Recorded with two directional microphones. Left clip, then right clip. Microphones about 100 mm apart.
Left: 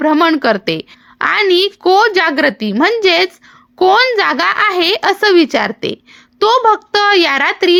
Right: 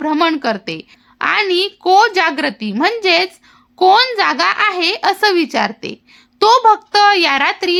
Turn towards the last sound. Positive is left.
turn(degrees=30)  # may be behind; listen again after turning